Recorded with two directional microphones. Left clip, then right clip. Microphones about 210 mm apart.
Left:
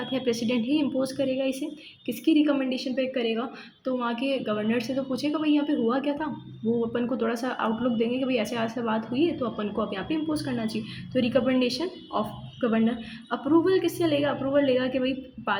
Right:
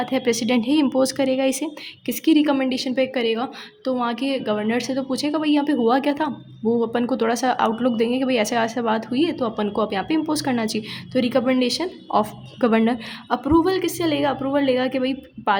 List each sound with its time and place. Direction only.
0.0 s a woman's voice: 40° right (ahead or behind)